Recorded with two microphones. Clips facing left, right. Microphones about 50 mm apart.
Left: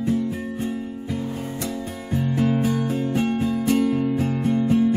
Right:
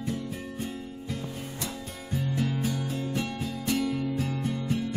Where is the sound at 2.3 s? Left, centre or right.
Left.